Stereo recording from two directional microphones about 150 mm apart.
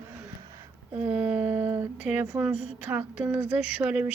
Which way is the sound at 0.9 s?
10° right (ahead or behind).